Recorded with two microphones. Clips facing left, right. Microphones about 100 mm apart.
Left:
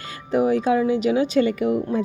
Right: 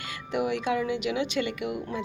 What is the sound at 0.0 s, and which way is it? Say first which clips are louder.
Speech: left 8 dB; 40° left (ahead or behind).